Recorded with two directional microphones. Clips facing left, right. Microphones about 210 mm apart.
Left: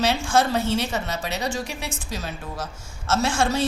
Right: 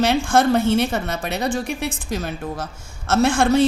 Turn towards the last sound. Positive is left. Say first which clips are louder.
# right 7 dB
turn(degrees=-55)  # may be behind; listen again after turning